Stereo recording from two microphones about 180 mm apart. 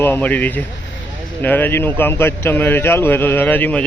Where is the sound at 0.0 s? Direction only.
10° left (ahead or behind).